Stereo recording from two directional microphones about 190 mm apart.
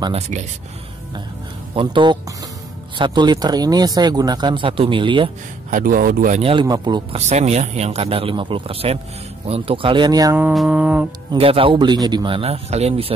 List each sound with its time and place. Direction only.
0.0 s speech: 30° right (ahead or behind)
1.8 s speech: 25° right (ahead or behind)
5.7 s speech: 45° right (ahead or behind)
6.4 s speech: 25° right (ahead or behind)
7.2 s speech: 35° right (ahead or behind); by 10.4 s 20° right (ahead or behind)
10.4 s mantra: 5° right (ahead or behind)
11.3 s speech: 30° right (ahead or behind)